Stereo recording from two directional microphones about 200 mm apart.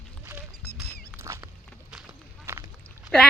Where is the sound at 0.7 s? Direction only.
50° left (ahead or behind).